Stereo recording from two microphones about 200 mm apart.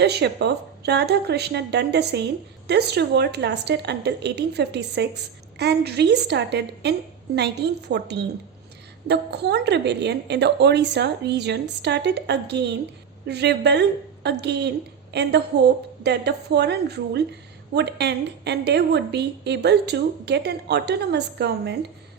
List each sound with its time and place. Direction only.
0.0 s a woman's voice: 55° right (ahead or behind)